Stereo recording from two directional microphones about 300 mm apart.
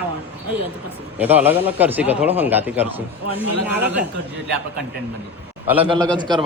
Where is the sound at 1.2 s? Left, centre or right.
Centre.